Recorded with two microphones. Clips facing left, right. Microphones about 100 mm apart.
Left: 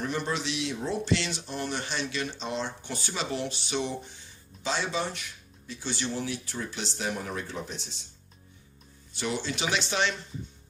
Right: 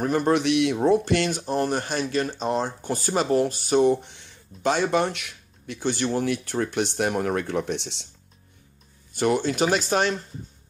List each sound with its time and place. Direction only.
0.0 s speech: 50° right (ahead or behind); by 8.1 s 70° right (ahead or behind)
9.1 s speech: 50° right (ahead or behind)